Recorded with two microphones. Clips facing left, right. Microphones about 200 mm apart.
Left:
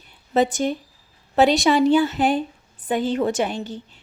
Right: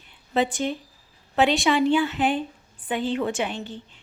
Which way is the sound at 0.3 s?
45° left (ahead or behind).